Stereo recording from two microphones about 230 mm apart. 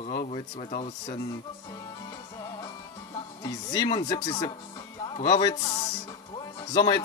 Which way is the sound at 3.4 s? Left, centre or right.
Centre.